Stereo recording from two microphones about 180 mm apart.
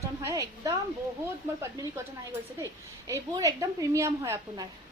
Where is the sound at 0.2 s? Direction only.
20° right (ahead or behind).